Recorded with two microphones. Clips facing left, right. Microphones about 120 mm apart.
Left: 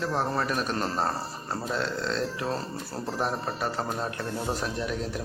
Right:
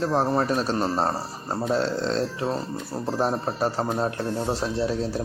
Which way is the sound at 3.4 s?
35° right (ahead or behind).